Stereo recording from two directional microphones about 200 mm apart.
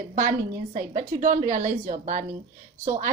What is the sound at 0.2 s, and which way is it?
A woman's voice, 45° right (ahead or behind).